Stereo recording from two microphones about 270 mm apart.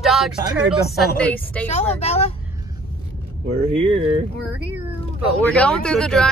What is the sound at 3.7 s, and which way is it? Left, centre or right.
Speech, right.